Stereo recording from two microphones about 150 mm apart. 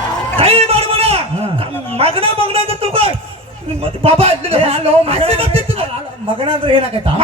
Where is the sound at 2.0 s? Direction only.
40° right (ahead or behind).